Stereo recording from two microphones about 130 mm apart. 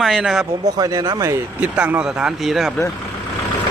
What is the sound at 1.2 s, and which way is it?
Speech, 10° right (ahead or behind).